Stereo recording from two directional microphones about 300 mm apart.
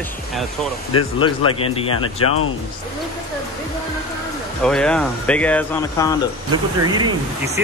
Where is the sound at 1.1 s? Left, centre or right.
Centre.